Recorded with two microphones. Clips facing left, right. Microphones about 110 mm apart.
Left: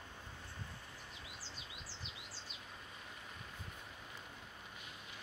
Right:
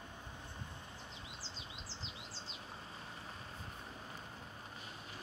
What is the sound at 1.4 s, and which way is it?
Bird, 25° right (ahead or behind).